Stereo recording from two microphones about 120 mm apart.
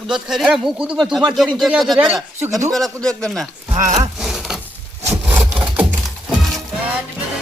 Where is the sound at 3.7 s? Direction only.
75° right (ahead or behind).